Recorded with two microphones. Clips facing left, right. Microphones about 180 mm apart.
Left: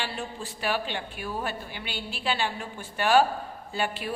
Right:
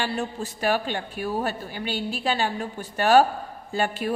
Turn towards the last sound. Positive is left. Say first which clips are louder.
# right 5 dB
turn(degrees=-45)  # may be behind; listen again after turning